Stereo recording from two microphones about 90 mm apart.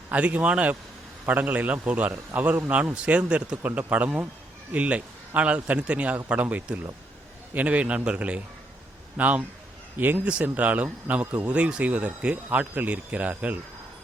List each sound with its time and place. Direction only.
0.1 s speech: 15° right (ahead or behind)